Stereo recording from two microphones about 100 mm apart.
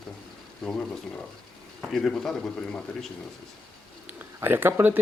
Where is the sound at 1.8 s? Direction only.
5° left (ahead or behind).